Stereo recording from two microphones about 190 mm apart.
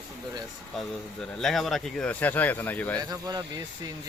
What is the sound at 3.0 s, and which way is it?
Speech, 20° right (ahead or behind).